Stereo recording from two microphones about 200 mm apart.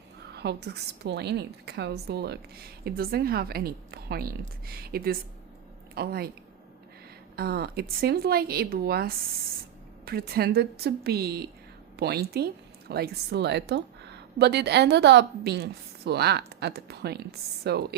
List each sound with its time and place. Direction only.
0.3 s a woman's voice: 55° right (ahead or behind)
7.3 s a woman's voice: 50° right (ahead or behind)